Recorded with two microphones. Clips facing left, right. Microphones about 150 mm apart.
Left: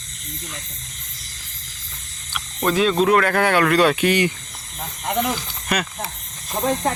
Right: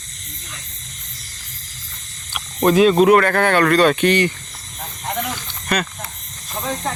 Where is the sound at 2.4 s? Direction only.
15° right (ahead or behind).